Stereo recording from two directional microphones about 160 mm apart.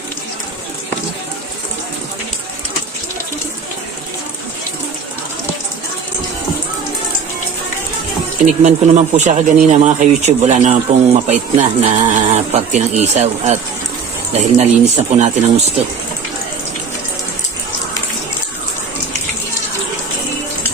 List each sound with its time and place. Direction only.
8.6 s speech: 45° right (ahead or behind)